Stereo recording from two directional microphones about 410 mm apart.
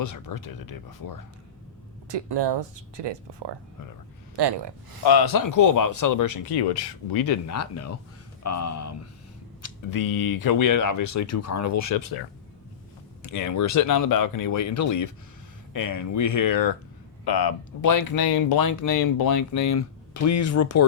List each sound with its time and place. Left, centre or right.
0.0 s speech: left
2.0 s speech: right
4.4 s speech: right
5.0 s a man's voice: left
5.5 s speech: left
9.6 s a sound: left
10.0 s speech: left
13.2 s speech: left